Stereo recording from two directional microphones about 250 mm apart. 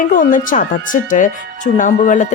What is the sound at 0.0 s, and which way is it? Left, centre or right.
Speech, left.